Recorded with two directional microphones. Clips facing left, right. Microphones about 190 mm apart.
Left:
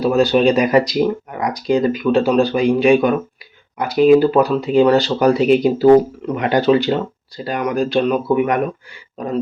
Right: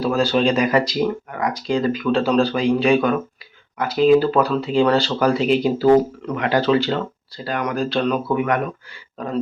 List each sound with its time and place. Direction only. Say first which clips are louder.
0.0 s speech: left 4 dB; 15° left (ahead or behind)